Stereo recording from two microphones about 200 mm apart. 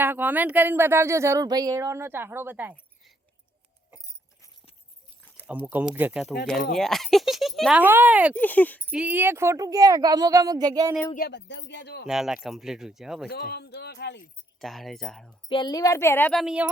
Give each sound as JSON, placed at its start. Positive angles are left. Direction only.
{"t": 0.0, "sound": "speech", "side_deg": -10}
{"t": 5.7, "sound": "speech", "side_deg": -10}
{"t": 8.4, "sound": "speech", "side_deg": 10}
{"t": 8.9, "sound": "speech", "side_deg": -5}
{"t": 11.1, "sound": "speech", "side_deg": 55}
{"t": 12.0, "sound": "speech", "side_deg": -5}
{"t": 13.3, "sound": "speech", "side_deg": 50}
{"t": 14.6, "sound": "speech", "side_deg": 0}
{"t": 15.4, "sound": "speech", "side_deg": 20}